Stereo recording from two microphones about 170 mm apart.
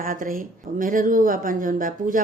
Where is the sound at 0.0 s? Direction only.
55° right (ahead or behind).